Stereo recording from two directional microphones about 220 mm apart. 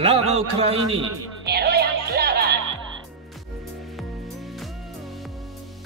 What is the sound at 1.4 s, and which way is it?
Music, 45° right (ahead or behind).